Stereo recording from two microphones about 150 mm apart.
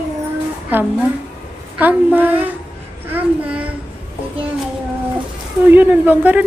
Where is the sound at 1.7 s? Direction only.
10° right (ahead or behind).